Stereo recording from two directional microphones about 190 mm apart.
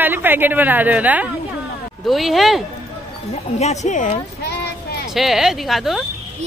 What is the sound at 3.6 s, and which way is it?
Speech, 35° left (ahead or behind).